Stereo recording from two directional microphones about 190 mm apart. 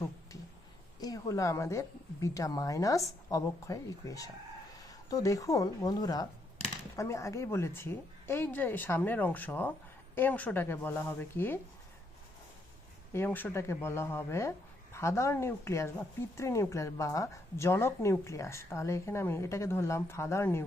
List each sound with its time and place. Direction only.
0.9 s a woman's voice: 20° left (ahead or behind)
13.1 s a woman's voice: 10° left (ahead or behind)